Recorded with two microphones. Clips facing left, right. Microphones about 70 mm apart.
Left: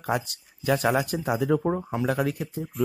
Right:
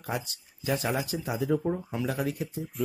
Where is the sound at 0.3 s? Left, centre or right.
Left.